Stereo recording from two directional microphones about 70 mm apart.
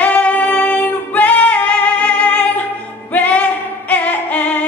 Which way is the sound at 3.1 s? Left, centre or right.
Left.